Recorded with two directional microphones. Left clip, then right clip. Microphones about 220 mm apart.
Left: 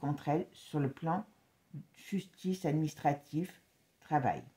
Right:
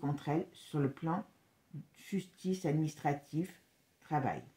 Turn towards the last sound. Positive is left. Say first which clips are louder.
# left 4 dB
turn(degrees=40)  # may be behind; listen again after turning